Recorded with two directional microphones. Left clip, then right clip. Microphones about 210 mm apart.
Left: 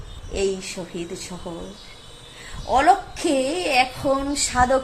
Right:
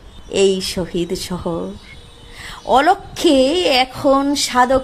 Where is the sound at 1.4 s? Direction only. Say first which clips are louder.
Right 12 dB; 40° right (ahead or behind).